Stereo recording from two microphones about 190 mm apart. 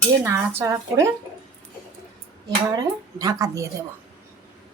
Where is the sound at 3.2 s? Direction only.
20° right (ahead or behind).